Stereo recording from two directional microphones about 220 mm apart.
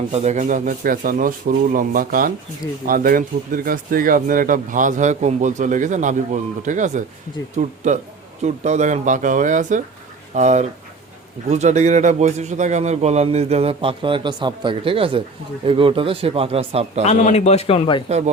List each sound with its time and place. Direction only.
0.1 s a man's voice: 30° right (ahead or behind)
17.1 s a man's voice: 30° left (ahead or behind)